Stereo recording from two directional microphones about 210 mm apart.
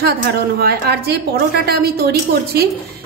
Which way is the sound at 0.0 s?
45° right (ahead or behind).